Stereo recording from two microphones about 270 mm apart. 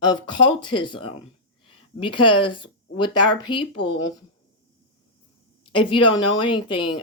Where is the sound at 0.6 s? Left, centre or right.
Centre.